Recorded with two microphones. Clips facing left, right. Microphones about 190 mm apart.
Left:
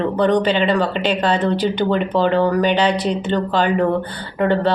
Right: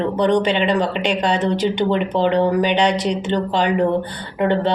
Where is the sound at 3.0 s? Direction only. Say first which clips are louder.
Even; 85° right.